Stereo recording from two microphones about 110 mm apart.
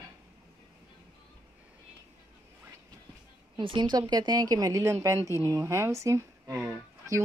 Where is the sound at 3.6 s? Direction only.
45° right (ahead or behind); by 7.2 s 25° right (ahead or behind).